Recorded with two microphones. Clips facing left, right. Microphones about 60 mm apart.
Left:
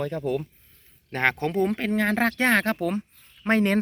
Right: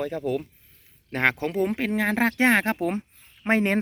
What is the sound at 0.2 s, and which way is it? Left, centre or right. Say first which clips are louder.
Speech: even; centre.